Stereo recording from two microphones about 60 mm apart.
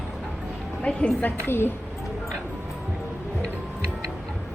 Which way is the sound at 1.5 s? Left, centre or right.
Left.